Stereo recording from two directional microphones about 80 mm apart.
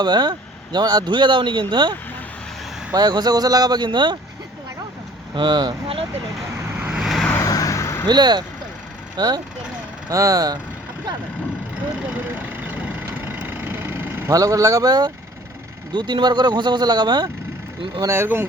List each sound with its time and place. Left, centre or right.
0.0 s speech: right
5.3 s speech: right
6.7 s vehicle: centre
7.0 s vehicle: centre
7.3 s vehicle: left
8.0 s speech: right
10.1 s speech: right
13.0 s vehicle: right
14.3 s speech: right
15.9 s speech: right
18.1 s speech: right